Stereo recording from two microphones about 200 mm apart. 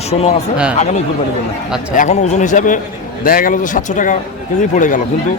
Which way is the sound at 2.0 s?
35° left (ahead or behind).